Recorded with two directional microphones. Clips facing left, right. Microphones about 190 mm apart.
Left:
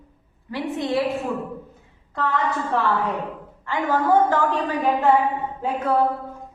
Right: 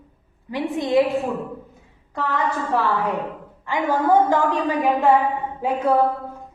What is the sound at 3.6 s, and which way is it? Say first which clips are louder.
A woman's voice: right 1 dB; 15° right (ahead or behind).